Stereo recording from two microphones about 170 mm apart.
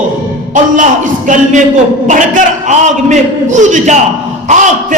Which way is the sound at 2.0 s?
50° right (ahead or behind).